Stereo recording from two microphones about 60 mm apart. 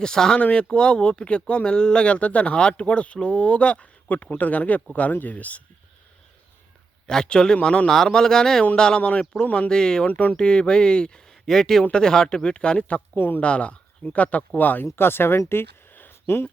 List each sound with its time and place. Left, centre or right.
0.0 s speech: centre
7.1 s speech: centre
10.1 s speech: left
10.3 s speech: centre
13.1 s speech: left
13.4 s speech: left
14.9 s speech: left
15.4 s a sound: left